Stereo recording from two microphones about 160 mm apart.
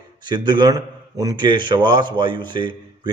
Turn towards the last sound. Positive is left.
turn(degrees=-30)  # may be behind; listen again after turning